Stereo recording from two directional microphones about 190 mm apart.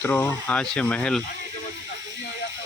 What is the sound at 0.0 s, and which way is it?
Speech, 10° left (ahead or behind).